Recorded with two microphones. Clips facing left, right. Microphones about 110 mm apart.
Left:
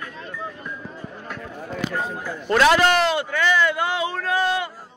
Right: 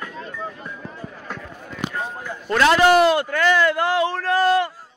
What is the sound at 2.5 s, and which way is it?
Speech, 10° left (ahead or behind).